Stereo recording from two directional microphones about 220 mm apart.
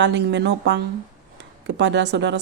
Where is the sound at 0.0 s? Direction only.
50° right (ahead or behind).